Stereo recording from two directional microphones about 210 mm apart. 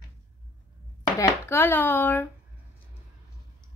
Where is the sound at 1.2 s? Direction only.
10° left (ahead or behind).